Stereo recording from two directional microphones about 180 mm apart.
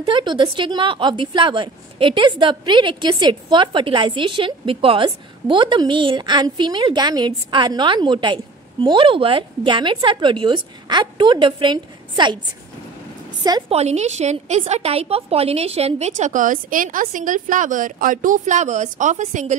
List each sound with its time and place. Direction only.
0.0 s a woman's voice: 25° right (ahead or behind)
13.4 s a woman's voice: 20° right (ahead or behind)
13.7 s a woman's voice: 35° right (ahead or behind)